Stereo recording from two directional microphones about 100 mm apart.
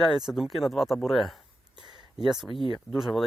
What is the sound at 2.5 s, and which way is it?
Speech, 60° right (ahead or behind).